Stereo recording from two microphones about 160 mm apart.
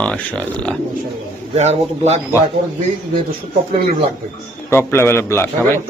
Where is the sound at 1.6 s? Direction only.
45° right (ahead or behind).